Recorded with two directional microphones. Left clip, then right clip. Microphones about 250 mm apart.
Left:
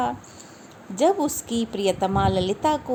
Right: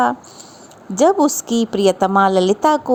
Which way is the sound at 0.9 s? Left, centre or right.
Right.